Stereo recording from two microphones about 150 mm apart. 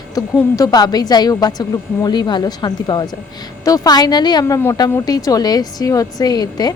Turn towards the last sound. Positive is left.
turn(degrees=25)  # may be behind; listen again after turning